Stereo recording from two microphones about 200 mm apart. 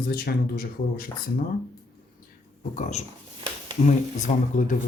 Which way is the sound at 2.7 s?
35° left (ahead or behind).